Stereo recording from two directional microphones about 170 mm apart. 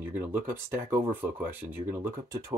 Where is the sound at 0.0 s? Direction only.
10° right (ahead or behind).